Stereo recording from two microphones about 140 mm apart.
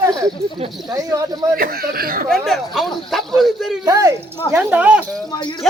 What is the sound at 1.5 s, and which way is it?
Speech, 90° right.